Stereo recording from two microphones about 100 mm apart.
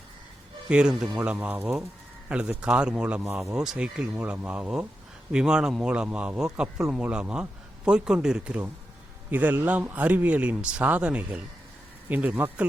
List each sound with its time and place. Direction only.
0.7 s speech: 10° right (ahead or behind)